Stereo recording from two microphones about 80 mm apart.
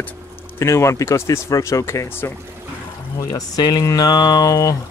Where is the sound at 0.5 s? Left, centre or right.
Left.